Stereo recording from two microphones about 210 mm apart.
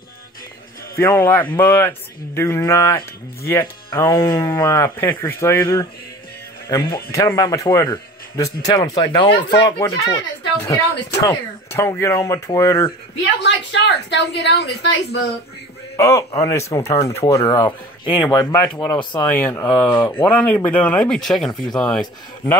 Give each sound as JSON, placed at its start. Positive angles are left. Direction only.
{"t": 0.9, "sound": "speech", "side_deg": 10}
{"t": 13.4, "sound": "a woman's voice", "side_deg": 55}
{"t": 16.0, "sound": "speech", "side_deg": 15}